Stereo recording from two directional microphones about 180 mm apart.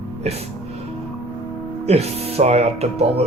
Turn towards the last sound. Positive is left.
turn(degrees=-35)  # may be behind; listen again after turning